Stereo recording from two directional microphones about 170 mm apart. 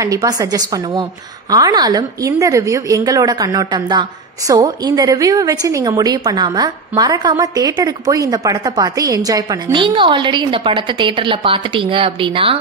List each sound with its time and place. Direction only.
0.0 s a woman's voice: 20° right (ahead or behind)